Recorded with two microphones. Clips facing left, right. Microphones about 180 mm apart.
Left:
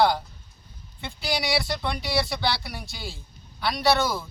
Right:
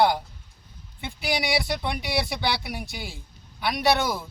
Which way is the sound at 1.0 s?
15° right (ahead or behind).